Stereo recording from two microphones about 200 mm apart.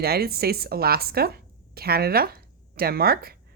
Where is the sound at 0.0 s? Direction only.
50° right (ahead or behind).